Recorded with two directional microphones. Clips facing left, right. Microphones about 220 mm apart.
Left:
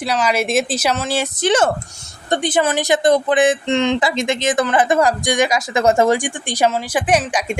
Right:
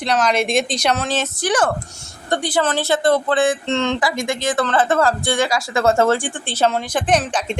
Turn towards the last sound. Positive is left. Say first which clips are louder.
# left 1 dB
turn(degrees=10)  # may be behind; listen again after turning